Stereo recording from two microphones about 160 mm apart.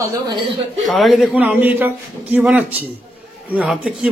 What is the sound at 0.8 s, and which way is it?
A man's voice, centre (ahead or behind).